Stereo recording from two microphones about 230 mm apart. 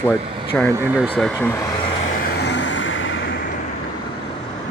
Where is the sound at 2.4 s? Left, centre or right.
Left.